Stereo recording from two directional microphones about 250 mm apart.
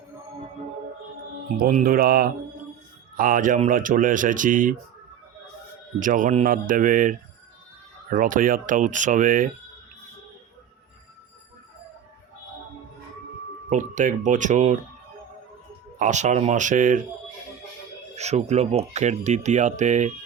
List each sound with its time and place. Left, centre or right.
1.1 s speech: right
6.0 s speech: right
13.7 s speech: right
16.0 s speech: right
18.2 s speech: right